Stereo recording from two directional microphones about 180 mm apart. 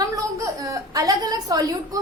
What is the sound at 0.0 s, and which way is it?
A woman's voice, 20° right (ahead or behind).